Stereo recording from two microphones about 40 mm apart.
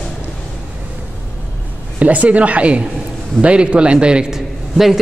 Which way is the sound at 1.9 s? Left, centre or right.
Right.